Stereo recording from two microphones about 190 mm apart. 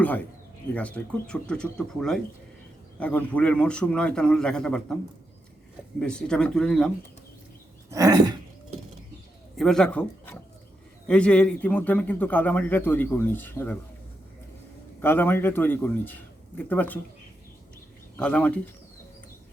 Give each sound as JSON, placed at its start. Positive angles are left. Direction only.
{"t": 0.7, "sound": "a man's voice", "side_deg": 5}
{"t": 6.0, "sound": "a man's voice", "side_deg": 5}
{"t": 7.9, "sound": "a sound", "side_deg": -20}
{"t": 9.6, "sound": "a man's voice", "side_deg": 5}
{"t": 15.0, "sound": "a man's voice", "side_deg": 10}
{"t": 18.2, "sound": "a man's voice", "side_deg": 5}